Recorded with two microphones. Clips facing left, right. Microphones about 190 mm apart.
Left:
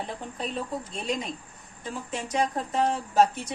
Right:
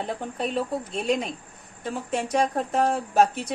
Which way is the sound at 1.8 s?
55° right (ahead or behind).